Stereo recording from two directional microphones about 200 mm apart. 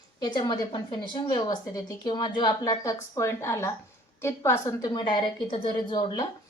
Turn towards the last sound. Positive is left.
turn(degrees=20)  # may be behind; listen again after turning